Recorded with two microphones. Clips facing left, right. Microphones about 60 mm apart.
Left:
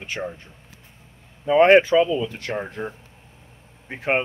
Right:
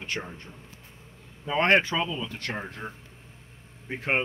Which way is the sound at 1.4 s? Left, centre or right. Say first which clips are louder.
Left 9 dB; centre.